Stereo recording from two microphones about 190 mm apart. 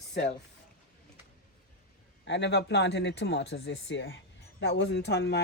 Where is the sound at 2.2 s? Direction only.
65° left (ahead or behind).